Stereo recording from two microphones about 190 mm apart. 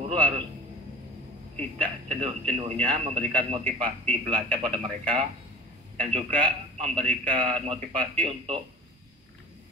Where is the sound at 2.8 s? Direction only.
25° right (ahead or behind).